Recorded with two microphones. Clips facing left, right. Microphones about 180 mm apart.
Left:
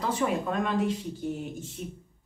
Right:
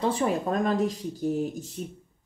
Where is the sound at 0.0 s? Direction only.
40° right (ahead or behind).